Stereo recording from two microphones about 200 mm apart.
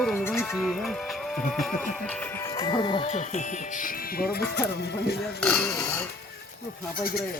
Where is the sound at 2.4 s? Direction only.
15° left (ahead or behind); by 5.2 s 55° left (ahead or behind).